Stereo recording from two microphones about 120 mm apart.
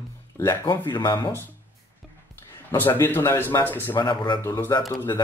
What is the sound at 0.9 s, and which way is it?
Speech, 40° left (ahead or behind).